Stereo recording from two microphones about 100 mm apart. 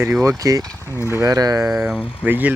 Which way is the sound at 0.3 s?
35° right (ahead or behind).